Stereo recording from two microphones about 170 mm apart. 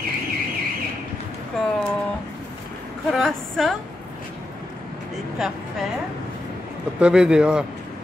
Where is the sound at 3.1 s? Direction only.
Centre (ahead or behind).